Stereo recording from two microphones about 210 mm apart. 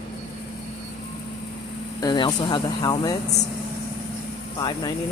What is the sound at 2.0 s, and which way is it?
Speech, 20° left (ahead or behind).